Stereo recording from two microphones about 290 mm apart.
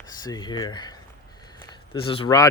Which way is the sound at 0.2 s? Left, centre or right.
Centre.